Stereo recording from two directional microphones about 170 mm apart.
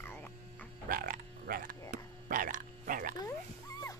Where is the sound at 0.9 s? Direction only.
55° right (ahead or behind).